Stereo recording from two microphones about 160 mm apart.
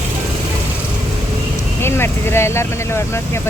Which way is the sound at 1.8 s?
15° left (ahead or behind).